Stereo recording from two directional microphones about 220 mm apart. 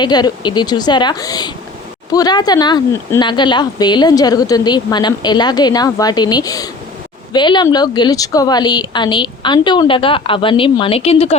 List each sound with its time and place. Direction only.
0.0 s speech: 20° left (ahead or behind)